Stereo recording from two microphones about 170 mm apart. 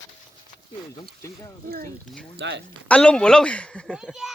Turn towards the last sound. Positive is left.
turn(degrees=0)  # may be behind; listen again after turning